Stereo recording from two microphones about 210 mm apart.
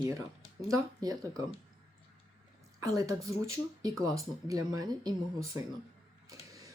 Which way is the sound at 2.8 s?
15° right (ahead or behind).